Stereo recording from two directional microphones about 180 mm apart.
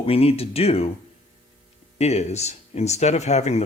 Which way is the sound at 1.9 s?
35° left (ahead or behind).